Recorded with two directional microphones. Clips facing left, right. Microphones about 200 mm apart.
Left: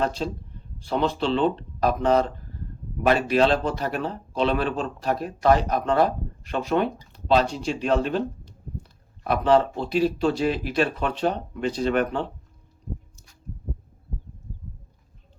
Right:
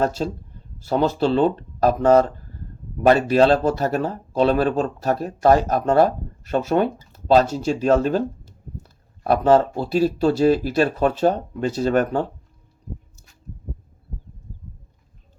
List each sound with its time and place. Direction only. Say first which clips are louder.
0.0 s speech: right 4 dB; 45° right (ahead or behind)